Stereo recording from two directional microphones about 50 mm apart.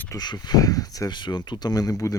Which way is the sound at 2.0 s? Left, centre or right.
Left.